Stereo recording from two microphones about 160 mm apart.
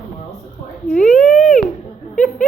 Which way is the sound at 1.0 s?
55° left (ahead or behind).